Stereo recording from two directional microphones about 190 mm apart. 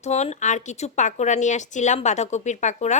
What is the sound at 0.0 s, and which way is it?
Speech, 35° left (ahead or behind).